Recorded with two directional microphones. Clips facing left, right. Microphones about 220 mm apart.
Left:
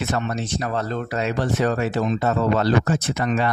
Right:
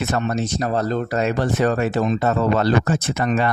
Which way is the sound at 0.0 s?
45° right (ahead or behind).